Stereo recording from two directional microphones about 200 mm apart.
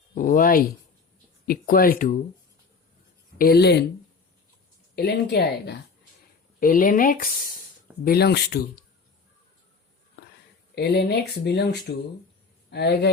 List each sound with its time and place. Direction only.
0.1 s speech: 40° left (ahead or behind)
3.3 s speech: 50° left (ahead or behind)
4.9 s speech: 55° left (ahead or behind)
6.6 s speech: 45° left (ahead or behind)
10.8 s speech: 55° left (ahead or behind)